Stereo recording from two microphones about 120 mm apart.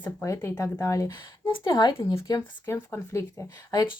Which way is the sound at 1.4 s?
40° left (ahead or behind).